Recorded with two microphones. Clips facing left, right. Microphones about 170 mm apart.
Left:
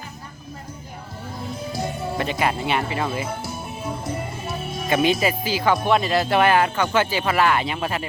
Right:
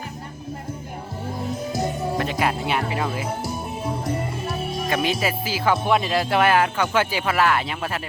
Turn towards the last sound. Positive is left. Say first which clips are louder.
# left 1 dB
turn(degrees=0)  # may be behind; listen again after turning